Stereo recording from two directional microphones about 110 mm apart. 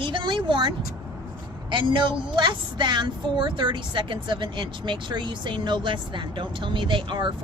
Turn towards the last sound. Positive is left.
turn(degrees=-45)  # may be behind; listen again after turning